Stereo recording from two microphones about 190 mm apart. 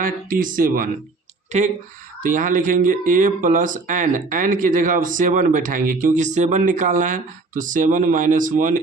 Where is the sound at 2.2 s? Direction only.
45° right (ahead or behind).